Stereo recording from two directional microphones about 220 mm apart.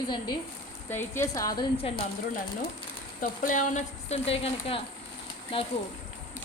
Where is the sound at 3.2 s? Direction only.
35° left (ahead or behind).